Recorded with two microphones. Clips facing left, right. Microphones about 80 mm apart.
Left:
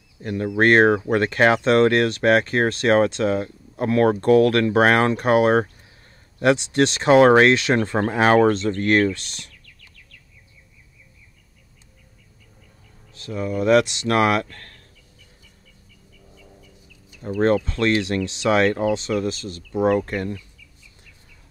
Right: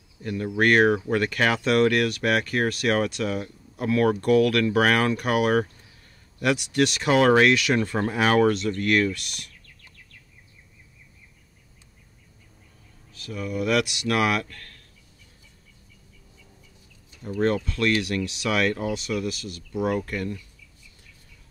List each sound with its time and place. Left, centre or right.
0.2 s speech: left
13.1 s speech: left
17.6 s speech: left